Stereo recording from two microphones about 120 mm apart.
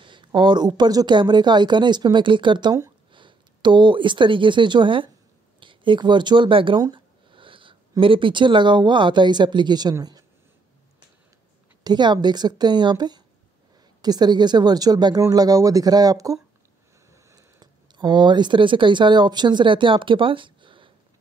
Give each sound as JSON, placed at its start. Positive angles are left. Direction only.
{"t": 0.0, "sound": "speech", "side_deg": -40}
{"t": 6.8, "sound": "a sound", "side_deg": -40}
{"t": 8.0, "sound": "speech", "side_deg": -45}
{"t": 11.8, "sound": "speech", "side_deg": -35}